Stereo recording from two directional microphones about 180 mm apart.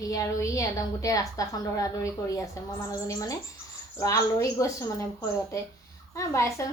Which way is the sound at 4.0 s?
20° left (ahead or behind).